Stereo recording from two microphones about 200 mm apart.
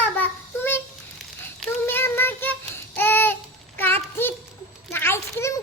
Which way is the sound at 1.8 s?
10° left (ahead or behind).